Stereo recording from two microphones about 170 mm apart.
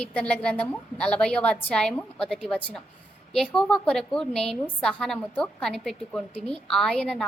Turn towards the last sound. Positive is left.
turn(degrees=5)  # may be behind; listen again after turning